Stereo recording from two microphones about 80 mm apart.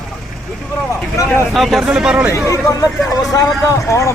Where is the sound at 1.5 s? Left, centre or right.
Centre.